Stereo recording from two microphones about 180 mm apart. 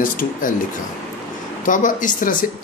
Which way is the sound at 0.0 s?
50° left (ahead or behind).